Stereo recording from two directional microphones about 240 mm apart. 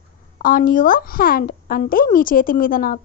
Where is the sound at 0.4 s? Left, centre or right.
Left.